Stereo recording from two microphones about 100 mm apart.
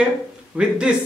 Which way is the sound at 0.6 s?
10° right (ahead or behind).